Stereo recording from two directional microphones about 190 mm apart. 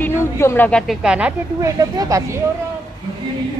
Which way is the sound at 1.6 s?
20° right (ahead or behind).